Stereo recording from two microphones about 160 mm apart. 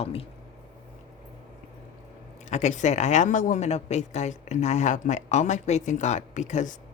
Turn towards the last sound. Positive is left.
turn(degrees=50)  # may be behind; listen again after turning